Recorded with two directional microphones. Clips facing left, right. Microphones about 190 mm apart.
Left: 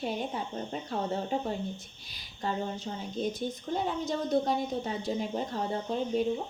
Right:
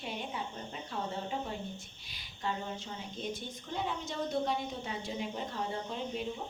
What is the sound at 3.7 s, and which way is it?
A woman's voice, 40° left (ahead or behind).